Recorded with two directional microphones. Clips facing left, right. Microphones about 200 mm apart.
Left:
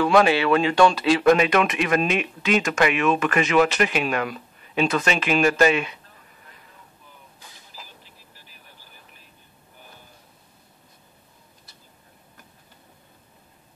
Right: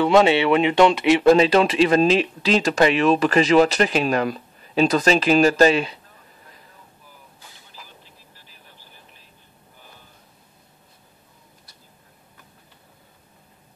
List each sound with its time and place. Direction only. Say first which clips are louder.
0.0 s speech: right 2 dB; 25° right (ahead or behind)